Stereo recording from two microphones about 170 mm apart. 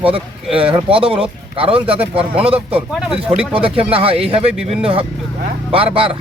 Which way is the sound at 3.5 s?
35° right (ahead or behind).